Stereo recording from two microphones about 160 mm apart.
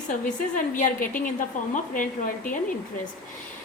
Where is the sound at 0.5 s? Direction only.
55° left (ahead or behind).